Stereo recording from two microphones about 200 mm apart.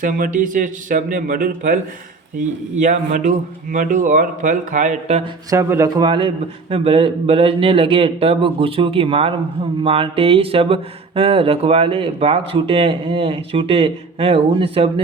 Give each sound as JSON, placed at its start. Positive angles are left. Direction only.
{"t": 0.0, "sound": "a man's voice", "side_deg": -40}
{"t": 5.5, "sound": "speech", "side_deg": -15}